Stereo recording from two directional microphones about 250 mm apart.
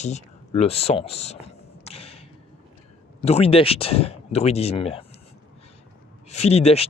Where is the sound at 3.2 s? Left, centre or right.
Left.